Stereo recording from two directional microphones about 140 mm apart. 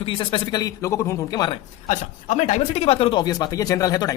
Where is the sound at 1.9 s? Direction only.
55° left (ahead or behind); by 3.2 s 40° left (ahead or behind).